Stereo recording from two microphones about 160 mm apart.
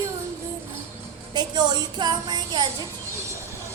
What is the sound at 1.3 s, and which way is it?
Music, 25° right (ahead or behind).